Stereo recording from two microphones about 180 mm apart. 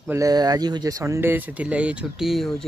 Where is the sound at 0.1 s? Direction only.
20° right (ahead or behind).